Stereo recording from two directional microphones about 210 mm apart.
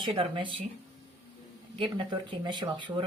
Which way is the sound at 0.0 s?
25° right (ahead or behind).